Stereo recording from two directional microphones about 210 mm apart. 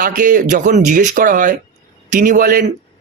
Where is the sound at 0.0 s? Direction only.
40° right (ahead or behind).